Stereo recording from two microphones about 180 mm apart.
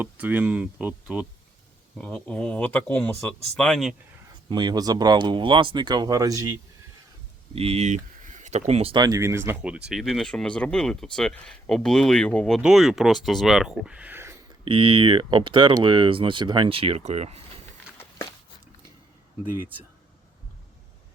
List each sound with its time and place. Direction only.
0.0 s speech: 10° right (ahead or behind)
2.0 s speech: 5° left (ahead or behind)
4.4 s speech: 25° right (ahead or behind)
7.5 s speech: 35° right (ahead or behind); by 14.3 s 15° right (ahead or behind)
14.6 s speech: 30° right (ahead or behind)